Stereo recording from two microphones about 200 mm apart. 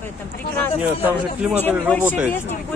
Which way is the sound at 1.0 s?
5° right (ahead or behind).